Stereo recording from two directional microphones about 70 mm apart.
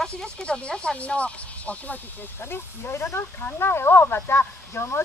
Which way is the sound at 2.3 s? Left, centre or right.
Left.